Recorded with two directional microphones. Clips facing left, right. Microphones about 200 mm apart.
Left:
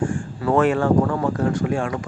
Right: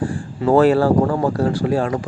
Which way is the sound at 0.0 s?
35° right (ahead or behind).